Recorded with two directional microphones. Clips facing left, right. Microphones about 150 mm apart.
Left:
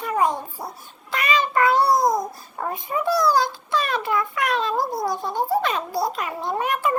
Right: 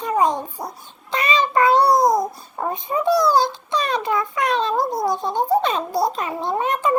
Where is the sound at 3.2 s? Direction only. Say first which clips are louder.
Right 2 dB; 25° right (ahead or behind).